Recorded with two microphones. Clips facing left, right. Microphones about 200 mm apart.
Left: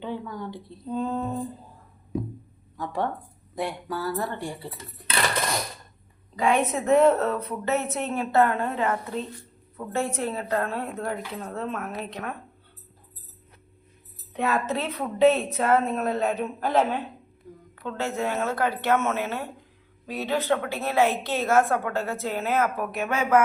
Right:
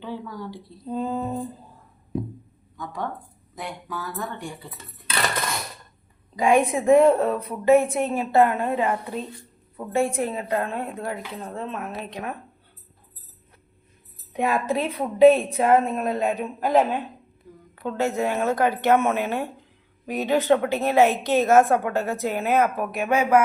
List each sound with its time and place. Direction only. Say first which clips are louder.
0.0 s speech: left 1 dB; 20° left (ahead or behind)
0.9 s a sound: right 1 dB; 5° right (ahead or behind)
2.7 s speech: left 3 dB; 30° left (ahead or behind)
6.3 s a woman's voice: right 4 dB; 15° right (ahead or behind)
11.4 s a sound: even; centre (ahead or behind)
11.9 s a woman's voice: right 1 dB; 10° right (ahead or behind)
14.3 s a woman's voice: right 3 dB; 10° right (ahead or behind)